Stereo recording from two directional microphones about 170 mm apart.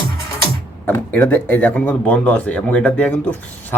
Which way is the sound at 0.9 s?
10° left (ahead or behind).